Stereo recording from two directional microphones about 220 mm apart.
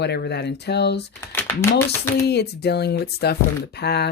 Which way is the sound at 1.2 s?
10° left (ahead or behind).